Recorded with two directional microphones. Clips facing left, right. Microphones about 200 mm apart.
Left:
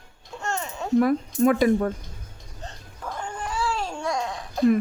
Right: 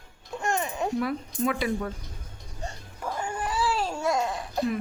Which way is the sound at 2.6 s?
10° right (ahead or behind).